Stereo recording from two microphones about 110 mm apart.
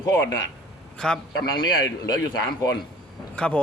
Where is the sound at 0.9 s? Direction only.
5° left (ahead or behind).